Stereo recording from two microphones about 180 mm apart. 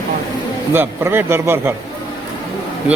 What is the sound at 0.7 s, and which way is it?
Speech, 10° right (ahead or behind).